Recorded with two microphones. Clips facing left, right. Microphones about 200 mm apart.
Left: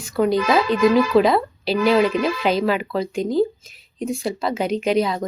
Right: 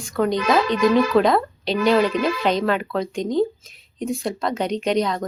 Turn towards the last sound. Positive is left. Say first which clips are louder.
# left 1 dB
turn(degrees=5)  # may be behind; listen again after turning